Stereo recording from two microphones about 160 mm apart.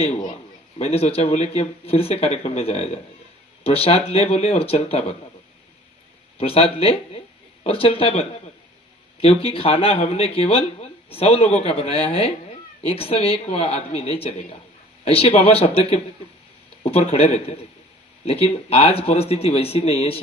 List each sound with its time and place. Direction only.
0.8 s speech: 40° left (ahead or behind)
6.3 s speech: 35° left (ahead or behind)